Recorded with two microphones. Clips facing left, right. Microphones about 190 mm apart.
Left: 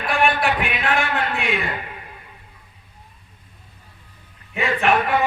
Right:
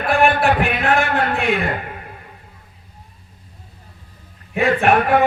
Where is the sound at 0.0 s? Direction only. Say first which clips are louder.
Right 4 dB; 45° right (ahead or behind).